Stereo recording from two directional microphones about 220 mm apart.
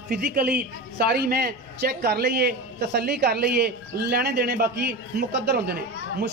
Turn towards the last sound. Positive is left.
turn(degrees=-45)  # may be behind; listen again after turning